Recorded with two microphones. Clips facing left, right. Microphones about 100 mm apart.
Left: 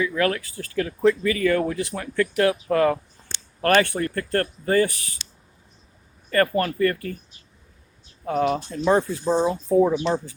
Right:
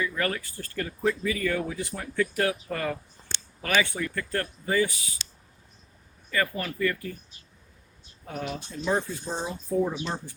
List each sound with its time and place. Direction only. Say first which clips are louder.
0.0 s speech: left 6 dB; 75° left (ahead or behind)
3.6 s speech: left 7 dB; 60° left (ahead or behind)
6.3 s speech: left 8 dB; 55° left (ahead or behind)
8.4 s speech: left 11 dB; 60° left (ahead or behind); by 10.3 s 90° left